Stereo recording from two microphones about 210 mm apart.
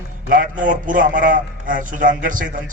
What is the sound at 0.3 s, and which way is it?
A man's voice, 40° right (ahead or behind).